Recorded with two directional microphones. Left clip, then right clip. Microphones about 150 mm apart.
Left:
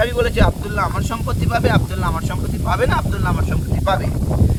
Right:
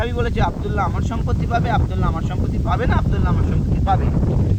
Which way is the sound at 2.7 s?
35° left (ahead or behind).